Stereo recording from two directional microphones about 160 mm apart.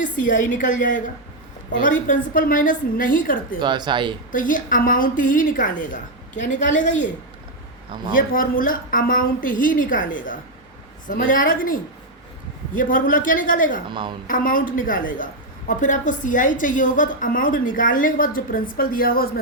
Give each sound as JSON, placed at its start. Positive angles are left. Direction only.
{"t": 0.0, "sound": "a woman's voice", "side_deg": 55}
{"t": 3.6, "sound": "speech", "side_deg": -30}
{"t": 4.3, "sound": "a woman's voice", "side_deg": 55}
{"t": 8.1, "sound": "a woman's voice", "side_deg": 60}